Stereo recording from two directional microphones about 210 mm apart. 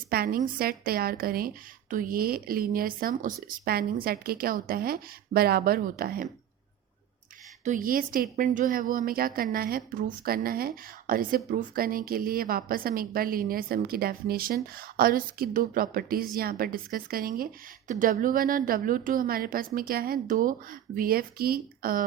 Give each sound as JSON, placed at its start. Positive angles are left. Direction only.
{"t": 0.1, "sound": "a woman's voice", "side_deg": -45}
{"t": 7.6, "sound": "a woman's voice", "side_deg": -40}